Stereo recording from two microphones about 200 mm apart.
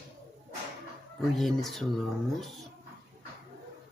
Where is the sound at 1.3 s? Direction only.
Centre (ahead or behind).